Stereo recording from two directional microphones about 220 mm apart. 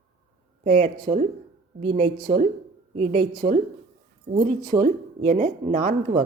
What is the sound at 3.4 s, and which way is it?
Speech, 25° right (ahead or behind).